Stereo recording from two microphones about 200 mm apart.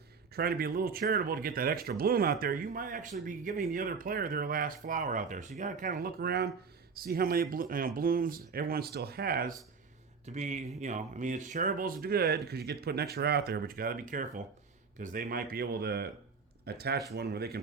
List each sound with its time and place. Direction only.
0.3 s speech: 50° right (ahead or behind)
10.2 s speech: 35° right (ahead or behind); by 17.6 s 55° right (ahead or behind)